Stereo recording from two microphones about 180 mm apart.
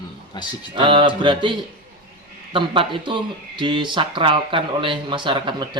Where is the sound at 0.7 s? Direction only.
30° right (ahead or behind).